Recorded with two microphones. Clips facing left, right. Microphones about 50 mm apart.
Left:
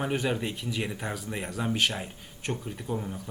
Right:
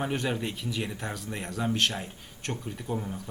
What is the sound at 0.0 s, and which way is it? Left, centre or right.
Speech, centre.